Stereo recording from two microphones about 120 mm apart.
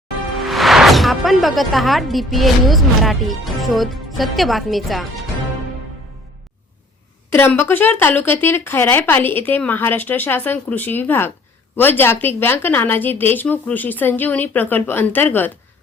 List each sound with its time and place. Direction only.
0.3 s speech: centre (ahead or behind)
7.3 s speech: 20° left (ahead or behind)